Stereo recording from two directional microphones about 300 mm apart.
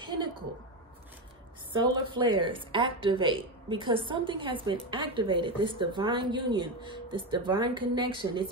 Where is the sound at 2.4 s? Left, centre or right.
Centre.